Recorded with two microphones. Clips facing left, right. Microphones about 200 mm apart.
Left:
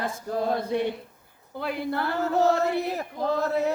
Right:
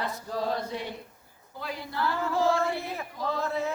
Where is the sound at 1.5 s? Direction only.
60° left (ahead or behind).